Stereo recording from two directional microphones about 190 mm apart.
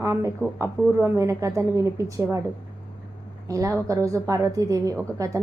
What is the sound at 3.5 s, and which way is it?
A woman's voice, 15° right (ahead or behind).